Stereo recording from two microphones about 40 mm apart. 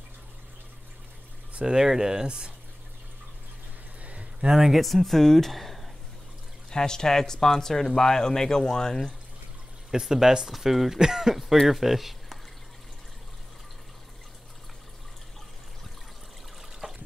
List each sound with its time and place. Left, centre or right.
1.7 s speech: centre
4.0 s a sound: right
4.7 s speech: centre
6.7 s speech: centre
9.8 s speech: centre
10.5 s speech: centre
16.8 s water: right